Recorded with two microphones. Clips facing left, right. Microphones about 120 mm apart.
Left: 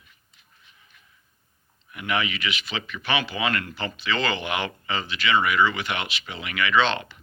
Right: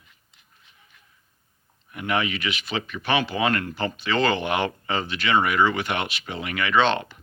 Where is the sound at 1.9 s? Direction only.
40° right (ahead or behind).